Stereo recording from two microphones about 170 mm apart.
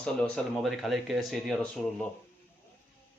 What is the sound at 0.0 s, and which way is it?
Speech, 5° left (ahead or behind).